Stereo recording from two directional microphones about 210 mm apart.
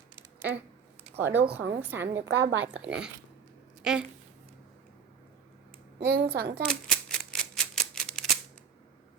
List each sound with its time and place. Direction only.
0.2 s a sound: 10° right (ahead or behind)
1.2 s a woman's voice: 10° right (ahead or behind)
1.5 s speech: 55° right (ahead or behind)
1.8 s a woman's voice: 10° right (ahead or behind)
2.2 s a woman's voice: 55° right (ahead or behind)
2.7 s speech: 5° right (ahead or behind)
6.1 s speech: 45° right (ahead or behind)
6.7 s typewriter: 5° left (ahead or behind)